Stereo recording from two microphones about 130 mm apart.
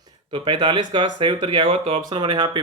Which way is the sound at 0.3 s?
40° right (ahead or behind).